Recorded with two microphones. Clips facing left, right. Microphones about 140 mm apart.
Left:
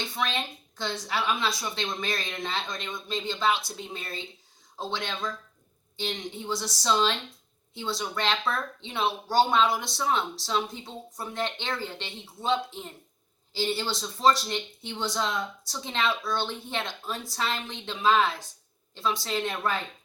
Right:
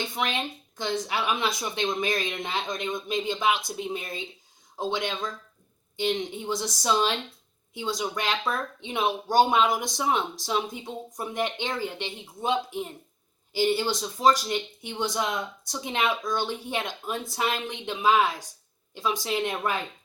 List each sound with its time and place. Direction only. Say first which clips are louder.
0.2 s a woman's voice: even; 15° right (ahead or behind)